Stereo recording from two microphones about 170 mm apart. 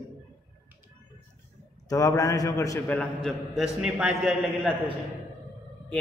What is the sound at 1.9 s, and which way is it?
A man's voice, 20° left (ahead or behind).